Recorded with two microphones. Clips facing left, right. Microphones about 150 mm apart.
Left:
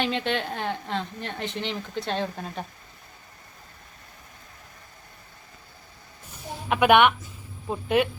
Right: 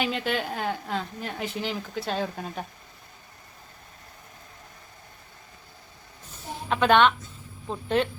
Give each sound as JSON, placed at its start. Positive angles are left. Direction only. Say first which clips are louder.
{"t": 0.0, "sound": "a woman's voice", "louder": "left 1 dB", "side_deg": -5}
{"t": 6.3, "sound": "a sound", "louder": "left 1 dB", "side_deg": 15}
{"t": 7.7, "sound": "speech", "louder": "left 2 dB", "side_deg": 10}